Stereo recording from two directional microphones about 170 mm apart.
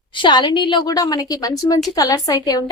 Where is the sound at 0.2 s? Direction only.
30° left (ahead or behind).